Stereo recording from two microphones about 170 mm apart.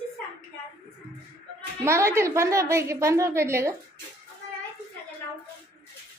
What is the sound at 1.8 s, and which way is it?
A woman's voice, 15° right (ahead or behind).